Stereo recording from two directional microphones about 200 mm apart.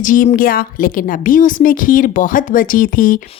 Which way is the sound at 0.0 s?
40° left (ahead or behind).